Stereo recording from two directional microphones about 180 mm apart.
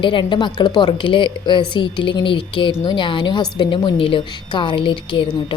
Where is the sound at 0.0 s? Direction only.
25° left (ahead or behind).